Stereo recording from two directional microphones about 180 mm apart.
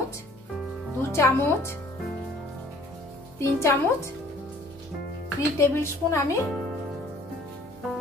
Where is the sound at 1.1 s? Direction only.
15° left (ahead or behind).